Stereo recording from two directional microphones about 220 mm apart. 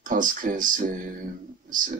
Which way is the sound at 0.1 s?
35° right (ahead or behind).